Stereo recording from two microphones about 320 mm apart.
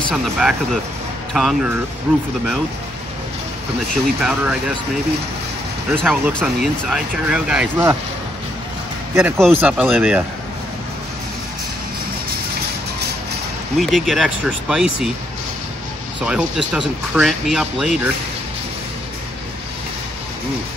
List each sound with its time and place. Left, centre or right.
0.1 s speech: centre
4.2 s speech: centre
5.9 s speech: centre
9.1 s speech: centre
13.7 s speech: centre
16.3 s speech: centre